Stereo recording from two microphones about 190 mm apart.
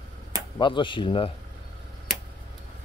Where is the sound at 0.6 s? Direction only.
25° left (ahead or behind).